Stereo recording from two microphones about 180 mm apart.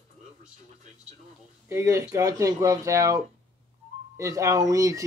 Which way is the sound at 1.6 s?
15° right (ahead or behind).